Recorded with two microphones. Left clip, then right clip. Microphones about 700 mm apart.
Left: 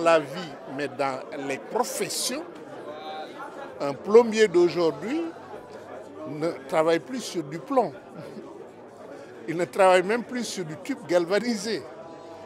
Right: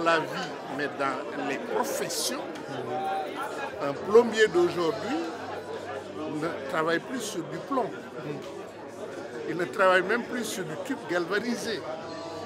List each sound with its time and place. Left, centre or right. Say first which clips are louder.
0.0 s speech: left 4 dB; left
3.8 s speech: left 3 dB; left
6.4 s speech: left 6 dB; left
9.5 s speech: left 4 dB; left